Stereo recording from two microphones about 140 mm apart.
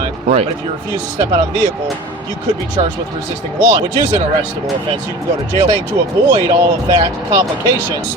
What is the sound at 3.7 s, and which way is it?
Speech, 30° right (ahead or behind).